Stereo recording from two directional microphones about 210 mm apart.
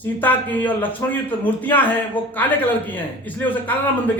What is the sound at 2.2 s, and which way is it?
Speech, 25° left (ahead or behind).